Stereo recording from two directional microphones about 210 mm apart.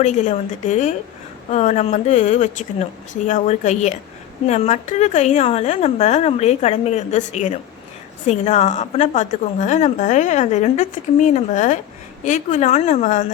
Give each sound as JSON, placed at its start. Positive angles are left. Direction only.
{"t": 0.0, "sound": "a woman's voice", "side_deg": 35}